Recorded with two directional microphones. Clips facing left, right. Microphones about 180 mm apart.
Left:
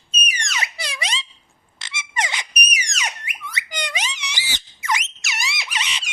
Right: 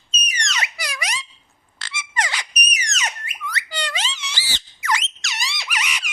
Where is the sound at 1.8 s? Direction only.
20° left (ahead or behind).